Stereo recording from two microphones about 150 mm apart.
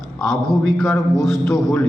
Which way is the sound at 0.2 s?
5° left (ahead or behind).